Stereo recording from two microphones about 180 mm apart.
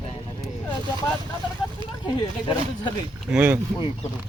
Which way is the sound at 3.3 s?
10° right (ahead or behind).